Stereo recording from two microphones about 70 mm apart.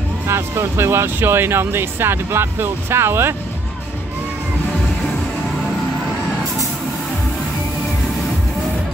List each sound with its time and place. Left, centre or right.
0.3 s speech: right